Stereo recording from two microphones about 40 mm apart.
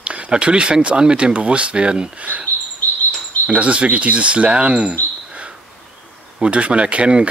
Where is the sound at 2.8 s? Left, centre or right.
Left.